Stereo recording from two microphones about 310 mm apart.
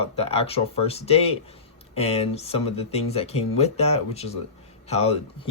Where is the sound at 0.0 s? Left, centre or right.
Centre.